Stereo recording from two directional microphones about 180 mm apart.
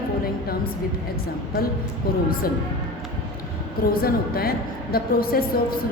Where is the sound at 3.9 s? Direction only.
55° left (ahead or behind).